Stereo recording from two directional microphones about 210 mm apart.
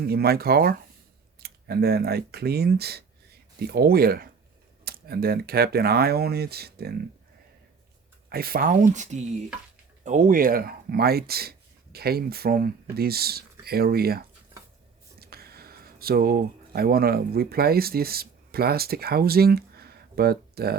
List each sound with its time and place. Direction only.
0.1 s speech: 50° right (ahead or behind)
8.3 s speech: 45° right (ahead or behind)